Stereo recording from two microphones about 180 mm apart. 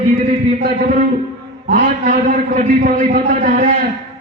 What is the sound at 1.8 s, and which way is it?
A man's voice, 45° right (ahead or behind).